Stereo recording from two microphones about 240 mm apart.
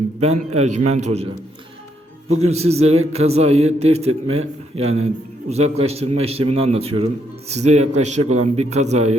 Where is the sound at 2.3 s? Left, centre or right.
Right.